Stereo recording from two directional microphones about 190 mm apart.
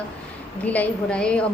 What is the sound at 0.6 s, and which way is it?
Speech, 10° left (ahead or behind).